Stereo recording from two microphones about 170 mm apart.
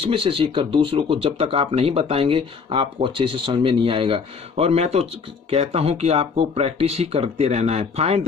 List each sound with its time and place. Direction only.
0.0 s speech: 30° right (ahead or behind)